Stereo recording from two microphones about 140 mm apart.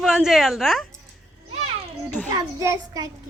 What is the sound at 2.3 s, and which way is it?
Speech, 25° right (ahead or behind).